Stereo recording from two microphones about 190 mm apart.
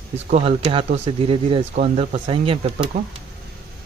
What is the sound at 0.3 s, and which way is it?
Speech, 30° right (ahead or behind).